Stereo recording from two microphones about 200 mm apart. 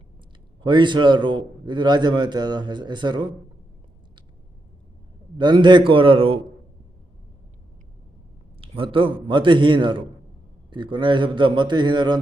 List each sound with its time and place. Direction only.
0.6 s a man's voice: 25° right (ahead or behind)
5.4 s a man's voice: 25° right (ahead or behind)
8.6 s a man's voice: 25° right (ahead or behind)